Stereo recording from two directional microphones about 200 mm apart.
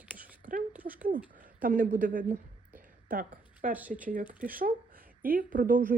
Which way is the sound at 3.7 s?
10° right (ahead or behind).